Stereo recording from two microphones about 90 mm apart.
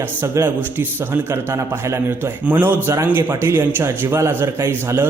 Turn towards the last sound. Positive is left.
turn(degrees=-25)  # may be behind; listen again after turning